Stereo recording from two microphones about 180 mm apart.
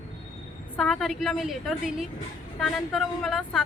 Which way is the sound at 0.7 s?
5° left (ahead or behind).